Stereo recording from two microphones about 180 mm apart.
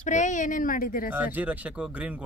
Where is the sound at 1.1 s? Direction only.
10° right (ahead or behind).